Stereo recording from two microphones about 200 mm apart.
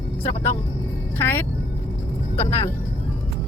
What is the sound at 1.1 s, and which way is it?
Speech, 10° left (ahead or behind).